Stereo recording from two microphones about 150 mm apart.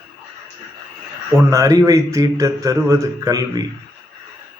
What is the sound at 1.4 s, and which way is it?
A man's voice, 20° right (ahead or behind).